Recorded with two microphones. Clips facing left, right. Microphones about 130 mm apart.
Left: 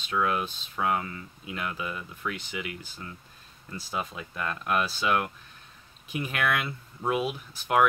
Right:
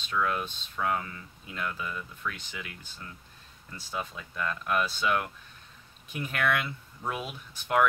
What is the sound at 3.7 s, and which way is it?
Speech, 10° left (ahead or behind).